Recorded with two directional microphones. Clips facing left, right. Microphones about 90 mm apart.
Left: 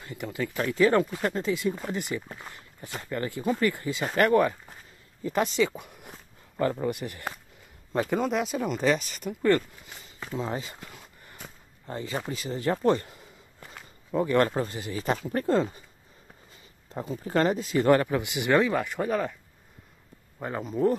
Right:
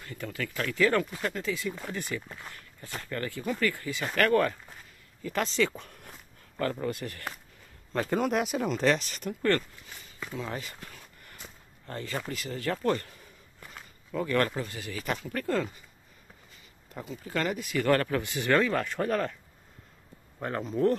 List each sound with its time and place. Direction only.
0.0 s speech: 20° left (ahead or behind)
8.1 s speech: centre (ahead or behind)
10.2 s a sound: 25° left (ahead or behind)
14.5 s speech: 30° left (ahead or behind)
16.9 s speech: 30° left (ahead or behind); by 19.3 s 5° left (ahead or behind)
20.3 s speech: 5° left (ahead or behind)